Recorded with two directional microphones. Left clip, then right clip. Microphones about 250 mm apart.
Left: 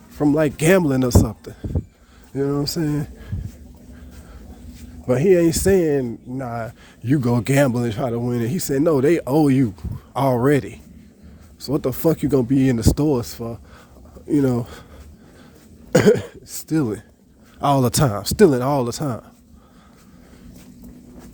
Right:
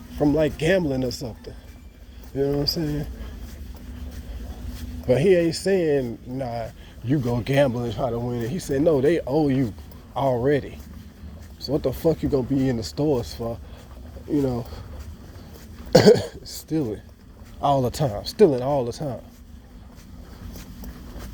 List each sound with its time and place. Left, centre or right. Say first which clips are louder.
0.2 s speech: left 2 dB; left
2.3 s speech: left 1 dB; left
2.6 s speech: left 1 dB; left
5.0 s speech: left 2 dB; left
14.3 s speech: left 5 dB; left
16.1 s speech: right 1 dB; centre
16.6 s speech: left 4 dB; left